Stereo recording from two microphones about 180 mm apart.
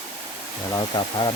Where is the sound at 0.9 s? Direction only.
25° left (ahead or behind).